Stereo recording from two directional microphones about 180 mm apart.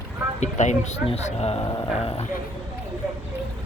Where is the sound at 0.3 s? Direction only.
40° left (ahead or behind).